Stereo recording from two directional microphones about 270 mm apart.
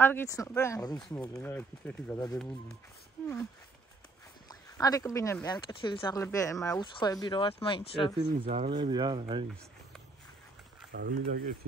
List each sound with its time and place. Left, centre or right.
0.0 s speech: centre
4.5 s speech: centre
8.2 s speech: right
10.9 s speech: right